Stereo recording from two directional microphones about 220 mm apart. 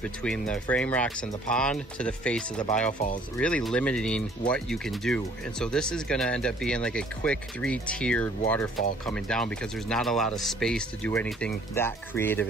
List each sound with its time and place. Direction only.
0.0 s speech: 5° left (ahead or behind)
2.9 s speech: 35° left (ahead or behind)
3.3 s speech: 5° left (ahead or behind)